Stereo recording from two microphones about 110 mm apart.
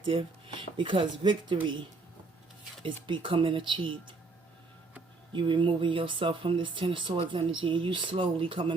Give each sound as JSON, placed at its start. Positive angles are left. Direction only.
{"t": 0.0, "sound": "speech", "side_deg": -55}
{"t": 2.8, "sound": "speech", "side_deg": -50}
{"t": 5.3, "sound": "speech", "side_deg": -45}